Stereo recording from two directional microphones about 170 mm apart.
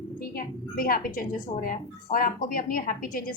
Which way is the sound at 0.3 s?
60° left (ahead or behind).